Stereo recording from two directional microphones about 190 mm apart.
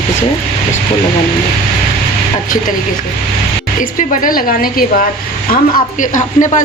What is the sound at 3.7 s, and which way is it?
Speech, 45° left (ahead or behind).